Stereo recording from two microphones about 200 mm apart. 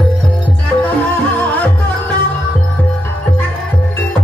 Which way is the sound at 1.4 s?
10° left (ahead or behind).